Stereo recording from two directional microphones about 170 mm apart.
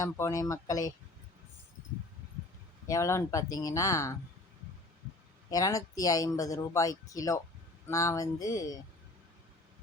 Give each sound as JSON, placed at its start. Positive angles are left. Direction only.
{"t": 0.0, "sound": "speech", "side_deg": 20}
{"t": 2.8, "sound": "speech", "side_deg": 20}
{"t": 5.5, "sound": "speech", "side_deg": 20}